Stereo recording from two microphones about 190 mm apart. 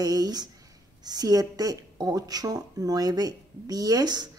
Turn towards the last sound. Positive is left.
turn(degrees=-20)  # may be behind; listen again after turning